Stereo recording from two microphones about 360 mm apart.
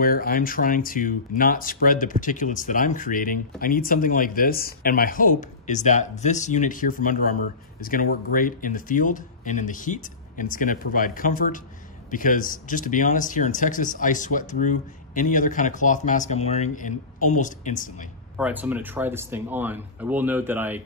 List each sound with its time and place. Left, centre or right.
0.0 s speech: left
18.4 s speech: centre